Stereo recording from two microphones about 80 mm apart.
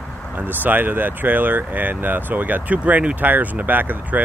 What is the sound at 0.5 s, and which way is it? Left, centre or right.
Speech, right.